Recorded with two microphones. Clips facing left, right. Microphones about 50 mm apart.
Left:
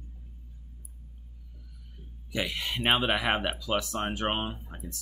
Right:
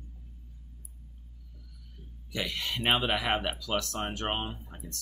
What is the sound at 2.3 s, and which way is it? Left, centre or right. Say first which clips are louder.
Speech: left 2 dB; centre.